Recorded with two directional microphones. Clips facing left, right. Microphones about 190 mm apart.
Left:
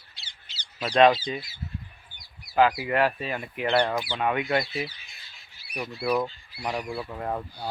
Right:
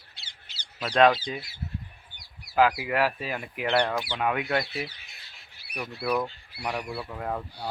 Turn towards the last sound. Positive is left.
turn(degrees=5)  # may be behind; listen again after turning